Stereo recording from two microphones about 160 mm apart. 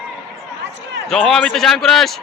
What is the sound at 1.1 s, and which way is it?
Speech, 5° left (ahead or behind).